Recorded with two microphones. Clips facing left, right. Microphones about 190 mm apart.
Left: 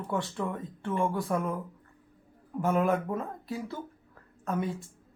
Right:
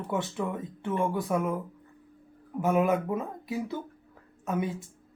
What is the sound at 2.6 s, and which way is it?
Speech, 10° right (ahead or behind).